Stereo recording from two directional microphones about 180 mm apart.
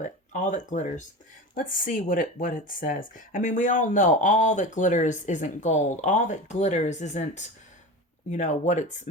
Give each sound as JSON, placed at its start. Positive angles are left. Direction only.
{"t": 0.0, "sound": "speech", "side_deg": 45}